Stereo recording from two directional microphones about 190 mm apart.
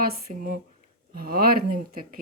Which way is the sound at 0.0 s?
50° right (ahead or behind).